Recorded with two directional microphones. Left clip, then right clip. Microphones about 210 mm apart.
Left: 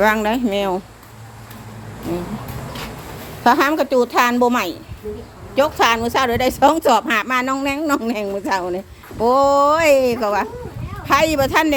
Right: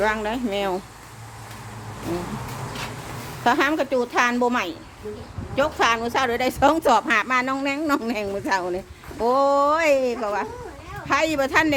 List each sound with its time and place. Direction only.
0.0 s a woman's voice: 30° left (ahead or behind)
3.4 s a woman's voice: 20° left (ahead or behind)